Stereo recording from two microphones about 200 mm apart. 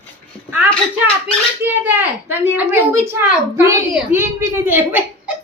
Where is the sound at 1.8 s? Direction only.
10° right (ahead or behind).